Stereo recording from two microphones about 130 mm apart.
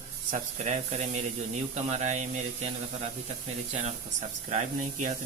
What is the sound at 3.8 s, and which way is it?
Speech, 60° right (ahead or behind).